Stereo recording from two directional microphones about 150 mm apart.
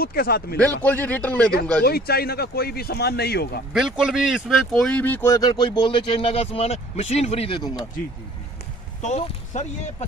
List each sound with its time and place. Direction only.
0.0 s speech: 90° left
0.6 s a man's voice: 10° left (ahead or behind)
1.9 s speech: 90° left
3.7 s speech: 5° right (ahead or behind); by 7.8 s 30° left (ahead or behind)
9.0 s speech: 50° left (ahead or behind)